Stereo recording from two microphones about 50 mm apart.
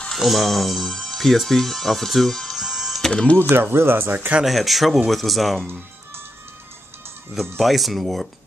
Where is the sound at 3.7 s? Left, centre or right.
Right.